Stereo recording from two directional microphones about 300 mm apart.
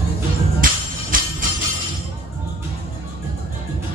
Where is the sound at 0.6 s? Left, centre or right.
Right.